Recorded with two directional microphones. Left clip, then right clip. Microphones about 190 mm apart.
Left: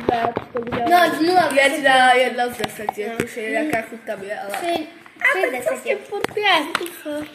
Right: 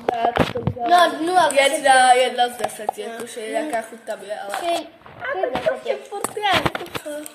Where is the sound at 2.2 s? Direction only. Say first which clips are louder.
Right 1 dB; 5° left (ahead or behind).